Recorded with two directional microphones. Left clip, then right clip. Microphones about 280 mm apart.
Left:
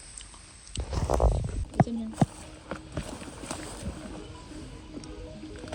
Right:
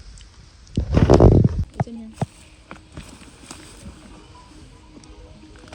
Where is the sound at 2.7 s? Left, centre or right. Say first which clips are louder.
Left 3 dB; centre.